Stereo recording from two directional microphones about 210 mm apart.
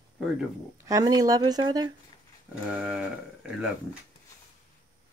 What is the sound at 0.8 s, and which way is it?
Speech, 15° right (ahead or behind).